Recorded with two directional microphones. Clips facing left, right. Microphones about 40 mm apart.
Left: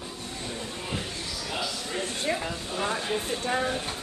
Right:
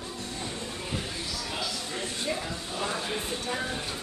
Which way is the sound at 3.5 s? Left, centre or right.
Left.